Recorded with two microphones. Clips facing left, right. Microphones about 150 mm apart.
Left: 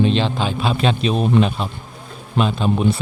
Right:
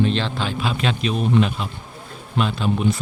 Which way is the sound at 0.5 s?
30° left (ahead or behind).